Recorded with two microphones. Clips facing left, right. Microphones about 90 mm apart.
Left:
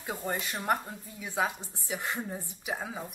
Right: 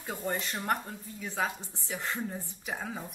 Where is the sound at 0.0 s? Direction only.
10° left (ahead or behind).